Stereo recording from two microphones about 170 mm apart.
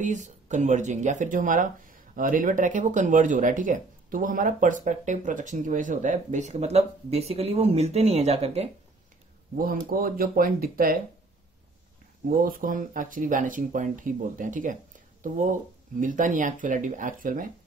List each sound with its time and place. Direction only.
0.0 s speech: 45° right (ahead or behind)
9.6 s speech: 60° right (ahead or behind)
12.3 s speech: 55° right (ahead or behind)